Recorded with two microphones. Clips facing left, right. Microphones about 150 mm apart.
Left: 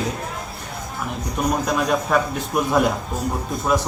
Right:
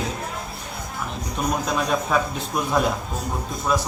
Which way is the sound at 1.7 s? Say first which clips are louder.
Left 1 dB; 5° left (ahead or behind).